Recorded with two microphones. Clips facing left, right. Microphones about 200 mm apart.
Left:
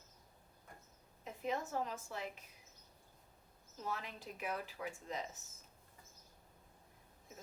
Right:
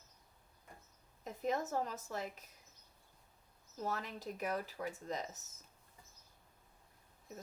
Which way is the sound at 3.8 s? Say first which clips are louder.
Right 3 dB; 40° right (ahead or behind).